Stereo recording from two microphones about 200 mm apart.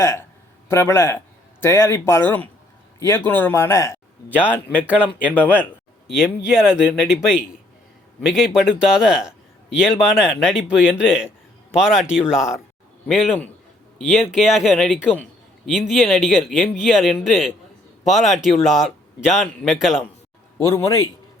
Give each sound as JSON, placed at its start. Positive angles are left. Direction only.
{"t": 0.0, "sound": "speech", "side_deg": 15}
{"t": 6.1, "sound": "a man's voice", "side_deg": -5}
{"t": 20.6, "sound": "speech", "side_deg": 15}